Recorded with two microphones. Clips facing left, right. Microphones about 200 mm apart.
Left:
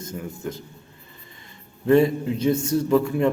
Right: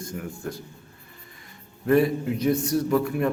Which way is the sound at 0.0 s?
20° left (ahead or behind).